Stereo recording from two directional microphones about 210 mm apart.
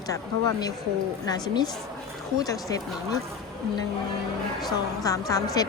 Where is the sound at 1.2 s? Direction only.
20° left (ahead or behind).